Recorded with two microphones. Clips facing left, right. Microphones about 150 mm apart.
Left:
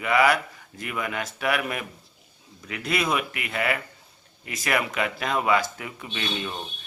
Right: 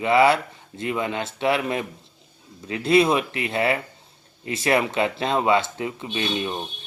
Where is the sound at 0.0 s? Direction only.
25° right (ahead or behind).